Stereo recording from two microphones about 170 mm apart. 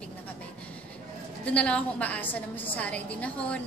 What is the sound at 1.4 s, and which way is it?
A woman's voice, 5° left (ahead or behind).